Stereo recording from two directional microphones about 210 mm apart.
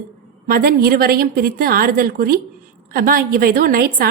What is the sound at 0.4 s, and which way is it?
A woman's voice, 45° right (ahead or behind).